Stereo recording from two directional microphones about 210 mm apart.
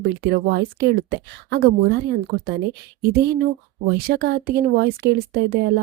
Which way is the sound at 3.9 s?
50° right (ahead or behind).